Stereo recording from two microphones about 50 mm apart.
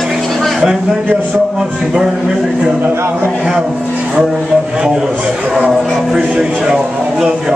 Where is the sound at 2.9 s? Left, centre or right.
Right.